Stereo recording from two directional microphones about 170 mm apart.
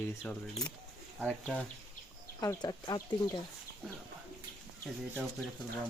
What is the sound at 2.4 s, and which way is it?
Speech, 20° left (ahead or behind).